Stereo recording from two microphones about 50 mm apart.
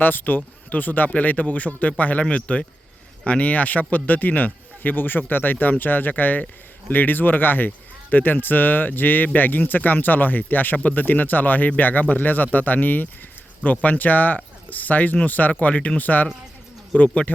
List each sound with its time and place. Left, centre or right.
0.0 s speech: left